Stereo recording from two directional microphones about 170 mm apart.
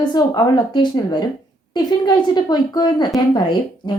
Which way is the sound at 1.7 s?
25° left (ahead or behind).